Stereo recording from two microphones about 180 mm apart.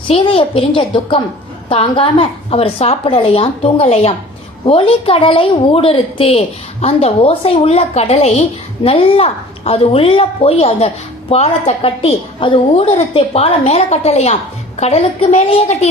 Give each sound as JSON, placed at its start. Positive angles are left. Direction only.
{"t": 0.1, "sound": "a woman's voice", "side_deg": 30}